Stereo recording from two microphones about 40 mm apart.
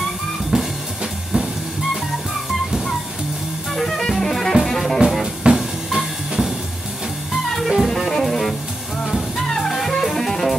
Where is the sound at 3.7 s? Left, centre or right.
Centre.